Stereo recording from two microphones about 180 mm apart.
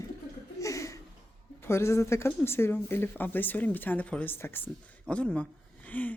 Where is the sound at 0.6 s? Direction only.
15° left (ahead or behind).